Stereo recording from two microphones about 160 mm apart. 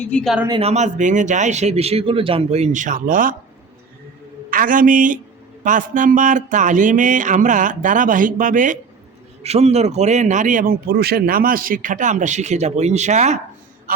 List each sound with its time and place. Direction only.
0.0 s speech: 5° left (ahead or behind)
0.6 s a man's voice: 45° right (ahead or behind)
4.5 s a man's voice: 60° right (ahead or behind)
9.4 s a man's voice: 40° right (ahead or behind)